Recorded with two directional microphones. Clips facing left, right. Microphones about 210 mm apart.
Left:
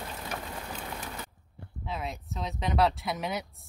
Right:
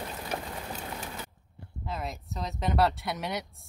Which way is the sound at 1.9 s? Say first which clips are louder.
Even; centre (ahead or behind).